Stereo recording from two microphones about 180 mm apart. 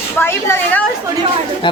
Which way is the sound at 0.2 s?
15° left (ahead or behind).